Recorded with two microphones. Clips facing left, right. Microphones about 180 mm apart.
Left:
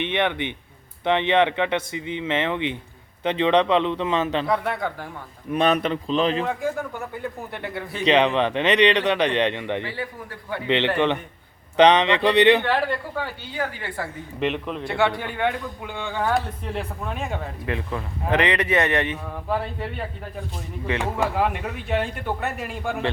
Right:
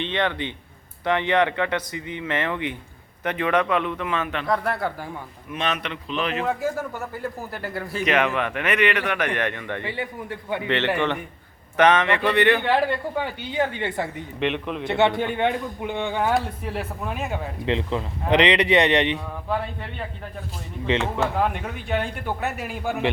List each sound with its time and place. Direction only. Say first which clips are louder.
0.0 s speech: left 1 dB; 15° left (ahead or behind)
4.4 s speech: even; centre (ahead or behind)
5.5 s speech: left 7 dB; 40° left (ahead or behind)
6.4 s speech: right 1 dB; 5° right (ahead or behind)
8.0 s speech: left 4 dB; 30° left (ahead or behind)
9.8 s a woman's voice: right 2 dB; 20° right (ahead or behind)
11.8 s speech: left 2 dB; 15° left (ahead or behind)
12.6 s a woman's voice: right 2 dB; 15° right (ahead or behind)
14.3 s speech: even; centre (ahead or behind)
14.8 s a woman's voice: right 3 dB; 20° right (ahead or behind)
16.7 s speech: left 1 dB; 5° right (ahead or behind)
17.7 s speech: right 5 dB; 20° right (ahead or behind)
21.0 s speech: even; 15° left (ahead or behind)
21.4 s speech: left 1 dB; centre (ahead or behind)